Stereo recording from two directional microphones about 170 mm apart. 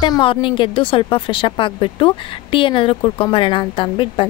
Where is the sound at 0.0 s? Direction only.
30° left (ahead or behind).